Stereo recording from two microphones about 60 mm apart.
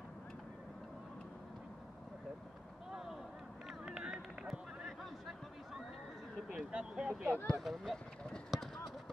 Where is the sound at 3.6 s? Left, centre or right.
Centre.